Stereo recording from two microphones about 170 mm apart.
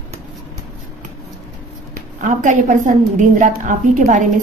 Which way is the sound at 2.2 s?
45° right (ahead or behind).